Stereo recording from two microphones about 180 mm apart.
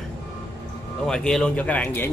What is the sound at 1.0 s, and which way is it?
Speech, 5° left (ahead or behind).